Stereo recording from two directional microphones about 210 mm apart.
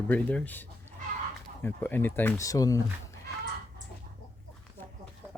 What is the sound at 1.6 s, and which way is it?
Speech, 10° left (ahead or behind).